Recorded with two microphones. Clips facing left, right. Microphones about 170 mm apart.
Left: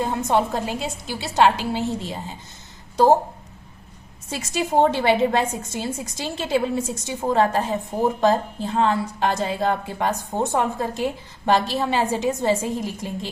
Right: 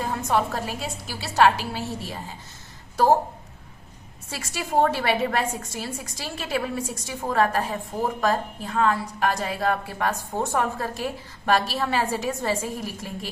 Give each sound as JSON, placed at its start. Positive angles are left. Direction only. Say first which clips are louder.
{"t": 0.0, "sound": "a woman's voice", "louder": "left 3 dB", "side_deg": 25}
{"t": 4.3, "sound": "a woman's voice", "louder": "left 5 dB", "side_deg": 20}